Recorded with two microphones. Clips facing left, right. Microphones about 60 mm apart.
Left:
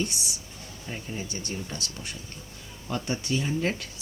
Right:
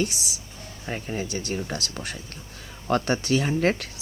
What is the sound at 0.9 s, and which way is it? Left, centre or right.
Speech, right.